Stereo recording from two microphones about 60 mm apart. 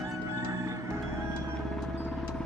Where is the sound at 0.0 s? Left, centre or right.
Right.